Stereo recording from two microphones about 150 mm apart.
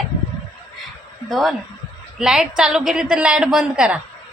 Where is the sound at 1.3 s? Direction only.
Centre (ahead or behind).